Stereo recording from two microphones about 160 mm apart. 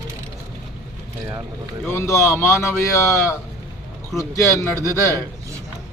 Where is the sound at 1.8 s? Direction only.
15° left (ahead or behind).